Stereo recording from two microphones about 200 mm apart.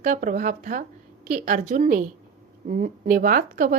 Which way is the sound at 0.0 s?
40° right (ahead or behind).